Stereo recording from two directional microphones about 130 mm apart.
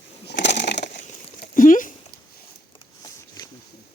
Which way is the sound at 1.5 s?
90° left.